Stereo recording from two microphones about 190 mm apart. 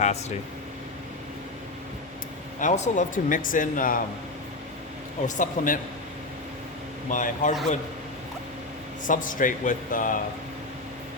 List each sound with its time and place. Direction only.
0.0 s speech: 35° left (ahead or behind)
2.6 s speech: 40° left (ahead or behind)
5.2 s speech: 45° left (ahead or behind)
7.1 s speech: 45° left (ahead or behind)
9.0 s speech: 45° left (ahead or behind)